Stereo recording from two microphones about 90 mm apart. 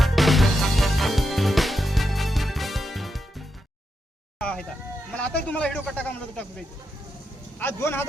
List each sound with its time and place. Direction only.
0.0 s music: centre (ahead or behind)
4.4 s a sound: 10° left (ahead or behind)
5.1 s speech: 10° left (ahead or behind)
7.6 s speech: 25° left (ahead or behind)